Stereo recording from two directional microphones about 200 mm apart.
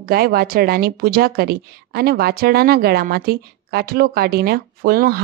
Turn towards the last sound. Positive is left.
turn(degrees=-50)  # may be behind; listen again after turning